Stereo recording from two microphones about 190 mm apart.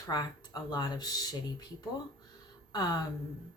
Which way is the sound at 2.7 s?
20° left (ahead or behind).